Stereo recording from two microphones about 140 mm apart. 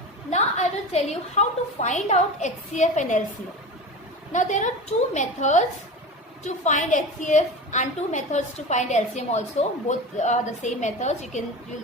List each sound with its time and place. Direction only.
0.3 s a woman's voice: 55° left (ahead or behind)
4.3 s a woman's voice: 60° left (ahead or behind)